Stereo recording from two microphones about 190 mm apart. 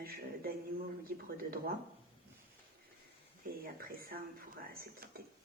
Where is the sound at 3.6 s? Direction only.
50° right (ahead or behind).